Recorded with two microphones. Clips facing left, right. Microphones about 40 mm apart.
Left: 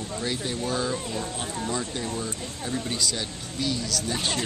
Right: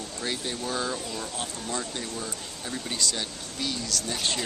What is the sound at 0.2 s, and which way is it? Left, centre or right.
Speech, centre.